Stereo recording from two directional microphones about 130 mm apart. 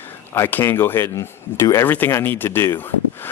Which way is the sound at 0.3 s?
15° left (ahead or behind).